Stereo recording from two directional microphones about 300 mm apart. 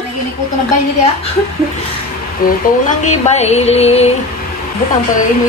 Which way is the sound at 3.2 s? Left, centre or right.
Left.